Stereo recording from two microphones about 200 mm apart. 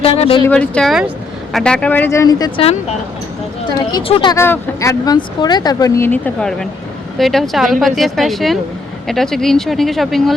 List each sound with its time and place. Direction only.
0.0 s speech: 30° left (ahead or behind)
0.4 s speech: 5° left (ahead or behind); by 2.7 s 25° left (ahead or behind)
3.9 s speech: 25° left (ahead or behind)
4.4 s speech: 10° left (ahead or behind)